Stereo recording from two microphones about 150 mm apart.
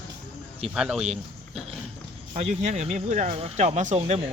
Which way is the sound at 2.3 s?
50° right (ahead or behind).